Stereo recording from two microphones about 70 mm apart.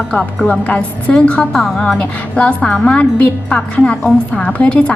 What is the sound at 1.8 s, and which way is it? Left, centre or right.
A woman's voice, centre.